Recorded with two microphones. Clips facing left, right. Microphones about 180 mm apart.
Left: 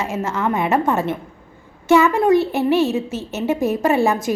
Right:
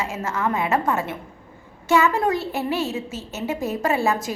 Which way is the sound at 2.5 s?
20° left (ahead or behind).